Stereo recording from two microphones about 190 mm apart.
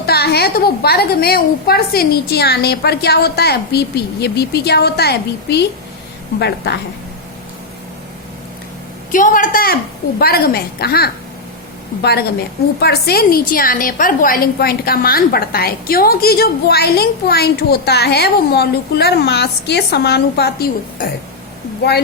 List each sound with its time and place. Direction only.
0.0 s a woman's voice: 55° left (ahead or behind)
9.1 s a woman's voice: 45° left (ahead or behind)